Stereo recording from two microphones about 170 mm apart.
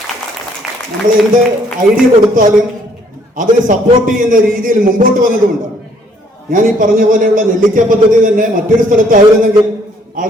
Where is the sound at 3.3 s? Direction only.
55° right (ahead or behind).